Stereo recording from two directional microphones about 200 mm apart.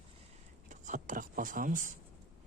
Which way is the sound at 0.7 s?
40° right (ahead or behind).